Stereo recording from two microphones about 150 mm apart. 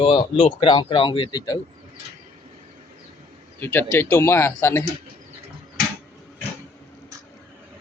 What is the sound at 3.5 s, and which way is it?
A man's voice, 15° left (ahead or behind).